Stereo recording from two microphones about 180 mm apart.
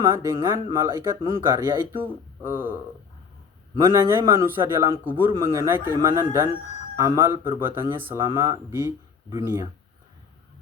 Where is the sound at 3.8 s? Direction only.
15° right (ahead or behind).